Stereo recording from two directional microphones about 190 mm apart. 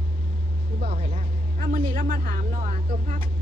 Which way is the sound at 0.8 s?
50° right (ahead or behind).